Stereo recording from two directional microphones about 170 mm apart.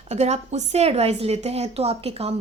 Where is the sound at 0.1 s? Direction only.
40° right (ahead or behind).